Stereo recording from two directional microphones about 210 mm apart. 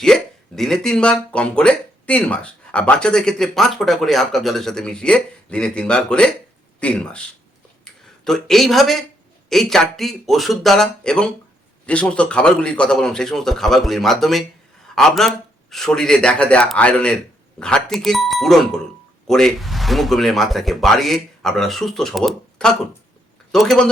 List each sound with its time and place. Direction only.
0.0 s speech: centre (ahead or behind)
8.2 s speech: centre (ahead or behind)